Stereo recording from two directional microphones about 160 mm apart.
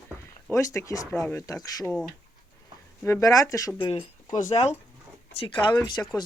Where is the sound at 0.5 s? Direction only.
20° left (ahead or behind).